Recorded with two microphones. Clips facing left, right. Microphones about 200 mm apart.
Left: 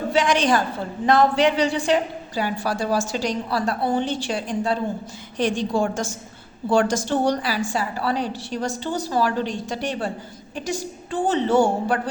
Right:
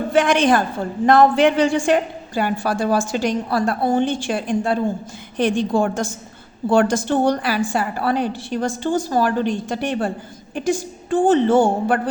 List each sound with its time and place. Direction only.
0.1 s a woman's voice: 55° right (ahead or behind)